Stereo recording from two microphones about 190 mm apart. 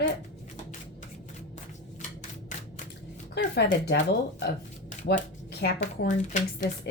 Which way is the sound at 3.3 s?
60° left (ahead or behind).